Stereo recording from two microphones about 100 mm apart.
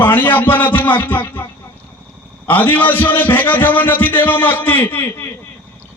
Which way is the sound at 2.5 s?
20° left (ahead or behind).